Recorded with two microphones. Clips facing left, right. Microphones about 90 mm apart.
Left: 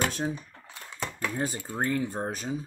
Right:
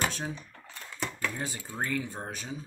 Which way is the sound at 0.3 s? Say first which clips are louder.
Left 4 dB; 15° left (ahead or behind).